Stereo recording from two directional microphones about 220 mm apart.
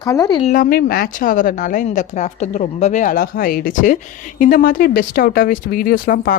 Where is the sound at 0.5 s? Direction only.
45° left (ahead or behind).